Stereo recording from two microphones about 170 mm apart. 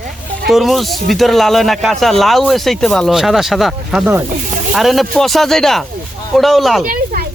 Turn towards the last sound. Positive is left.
turn(degrees=-55)  # may be behind; listen again after turning